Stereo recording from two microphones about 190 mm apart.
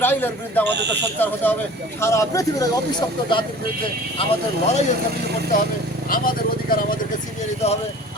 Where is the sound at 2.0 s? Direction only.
15° left (ahead or behind).